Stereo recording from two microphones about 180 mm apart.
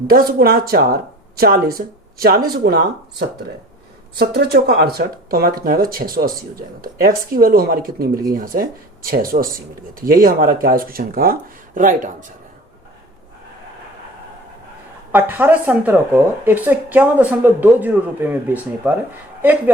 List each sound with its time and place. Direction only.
0.1 s speech: 55° right (ahead or behind)
15.1 s speech: 10° right (ahead or behind)